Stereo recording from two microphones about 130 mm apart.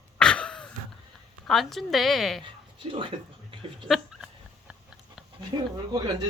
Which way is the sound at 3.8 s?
Centre (ahead or behind).